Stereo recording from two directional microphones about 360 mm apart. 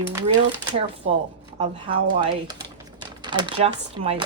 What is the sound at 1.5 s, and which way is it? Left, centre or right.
Speech, centre.